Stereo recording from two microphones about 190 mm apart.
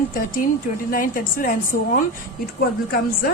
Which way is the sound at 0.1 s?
45° left (ahead or behind).